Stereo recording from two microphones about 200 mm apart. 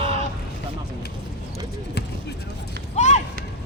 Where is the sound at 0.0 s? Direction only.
30° right (ahead or behind).